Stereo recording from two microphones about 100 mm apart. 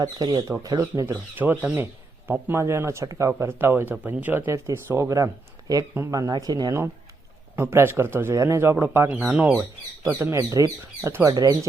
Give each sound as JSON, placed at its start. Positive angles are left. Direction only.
{"t": 0.0, "sound": "speech", "side_deg": -45}
{"t": 1.1, "sound": "speech", "side_deg": -15}
{"t": 7.5, "sound": "speech", "side_deg": -25}
{"t": 9.5, "sound": "speech", "side_deg": -35}